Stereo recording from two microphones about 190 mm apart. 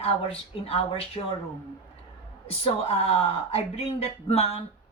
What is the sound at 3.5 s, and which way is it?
A woman's voice, 30° left (ahead or behind).